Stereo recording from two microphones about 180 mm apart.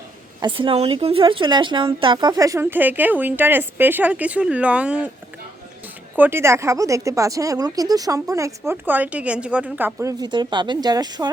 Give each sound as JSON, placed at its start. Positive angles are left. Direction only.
{"t": 0.3, "sound": "speech", "side_deg": -25}
{"t": 6.1, "sound": "speech", "side_deg": -10}